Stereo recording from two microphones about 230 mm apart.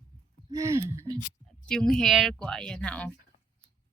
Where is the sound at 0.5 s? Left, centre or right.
Centre.